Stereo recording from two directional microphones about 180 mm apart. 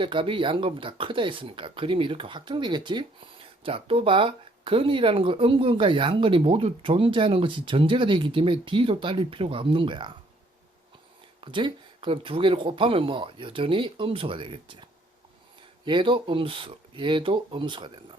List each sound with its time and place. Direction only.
0.0 s speech: 30° right (ahead or behind)
11.3 s speech: 25° right (ahead or behind)